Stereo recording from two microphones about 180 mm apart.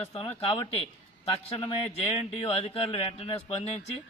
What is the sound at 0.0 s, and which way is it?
A man's voice, 35° left (ahead or behind).